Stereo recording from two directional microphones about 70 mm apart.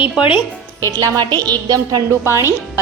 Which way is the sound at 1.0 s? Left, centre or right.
Right.